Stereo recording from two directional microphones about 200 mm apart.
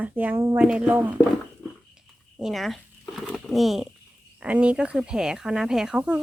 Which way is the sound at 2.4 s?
Centre (ahead or behind).